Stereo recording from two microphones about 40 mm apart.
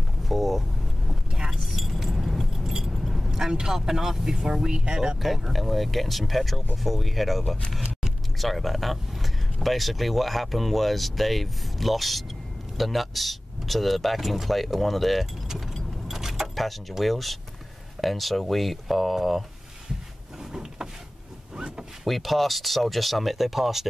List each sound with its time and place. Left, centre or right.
0.2 s vehicle: centre
1.3 s vehicle: centre
1.6 s keys jangling: centre
3.4 s speech: centre
5.5 s speech: centre
16.1 s vehicle: centre
17.0 s speech: centre
21.5 s speech: right
22.0 s speech: centre